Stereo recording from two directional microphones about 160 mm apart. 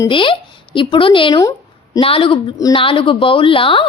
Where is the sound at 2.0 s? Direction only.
35° left (ahead or behind).